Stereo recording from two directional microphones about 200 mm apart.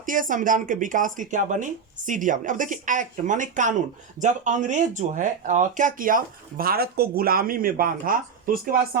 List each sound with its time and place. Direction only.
0.0 s speech: 40° right (ahead or behind)